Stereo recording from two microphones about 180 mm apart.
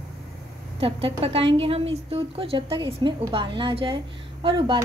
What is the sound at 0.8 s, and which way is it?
A woman's voice, 30° right (ahead or behind).